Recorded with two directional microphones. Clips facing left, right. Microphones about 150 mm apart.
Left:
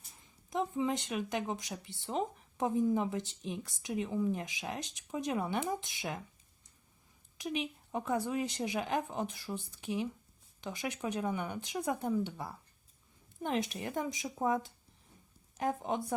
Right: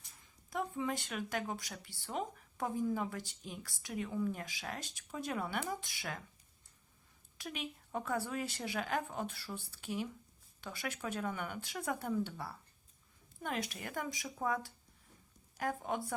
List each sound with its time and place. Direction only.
0.5 s speech: 20° left (ahead or behind)
7.3 s a woman's voice: 20° left (ahead or behind)